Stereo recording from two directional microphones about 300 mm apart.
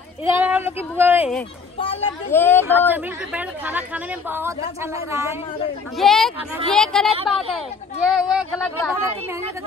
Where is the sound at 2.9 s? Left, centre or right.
Centre.